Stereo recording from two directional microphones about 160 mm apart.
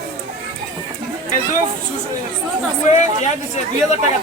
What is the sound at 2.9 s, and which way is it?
Speech, 45° left (ahead or behind).